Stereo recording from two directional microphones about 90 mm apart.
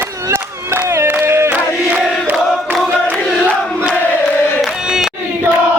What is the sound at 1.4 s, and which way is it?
Crowd, 15° right (ahead or behind).